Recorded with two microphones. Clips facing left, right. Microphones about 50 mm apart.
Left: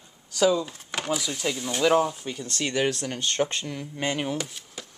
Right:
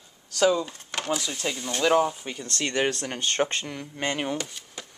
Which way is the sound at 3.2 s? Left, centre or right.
Right.